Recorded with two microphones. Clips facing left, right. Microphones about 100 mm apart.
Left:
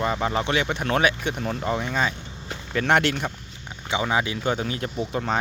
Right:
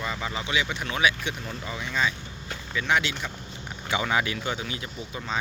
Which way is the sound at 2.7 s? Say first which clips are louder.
Left 5 dB; 55° left (ahead or behind).